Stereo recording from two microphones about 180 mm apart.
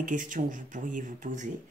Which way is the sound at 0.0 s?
45° right (ahead or behind).